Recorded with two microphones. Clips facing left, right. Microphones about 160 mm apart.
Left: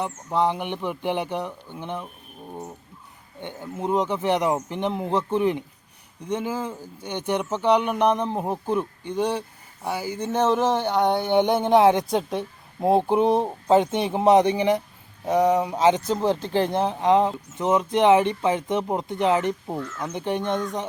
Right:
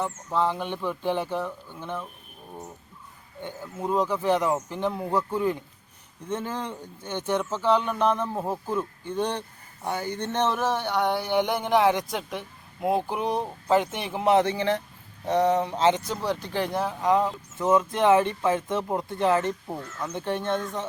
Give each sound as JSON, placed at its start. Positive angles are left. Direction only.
{"t": 0.0, "sound": "speech", "side_deg": 15}
{"t": 3.4, "sound": "speech", "side_deg": 20}
{"t": 7.1, "sound": "speech", "side_deg": 15}
{"t": 16.1, "sound": "speech", "side_deg": 30}